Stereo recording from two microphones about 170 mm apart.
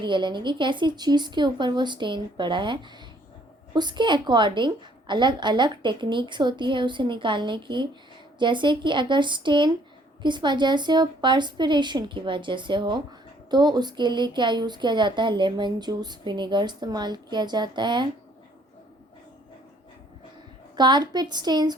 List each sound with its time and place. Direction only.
0.0 s speech: 25° right (ahead or behind)
3.8 s speech: 25° right (ahead or behind)
20.7 s speech: 25° right (ahead or behind)